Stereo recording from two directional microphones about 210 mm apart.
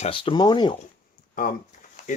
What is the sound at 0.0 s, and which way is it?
Speech, 25° left (ahead or behind).